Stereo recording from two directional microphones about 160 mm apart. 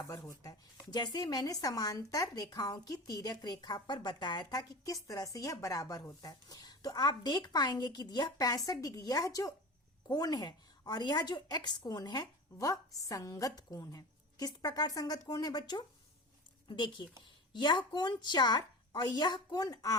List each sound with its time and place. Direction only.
0.0 s a woman's voice: 20° left (ahead or behind)